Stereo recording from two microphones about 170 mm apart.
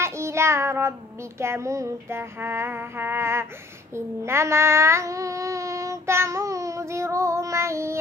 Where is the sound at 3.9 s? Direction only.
15° right (ahead or behind).